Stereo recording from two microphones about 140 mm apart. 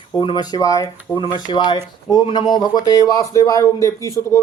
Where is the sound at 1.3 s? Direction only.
30° left (ahead or behind).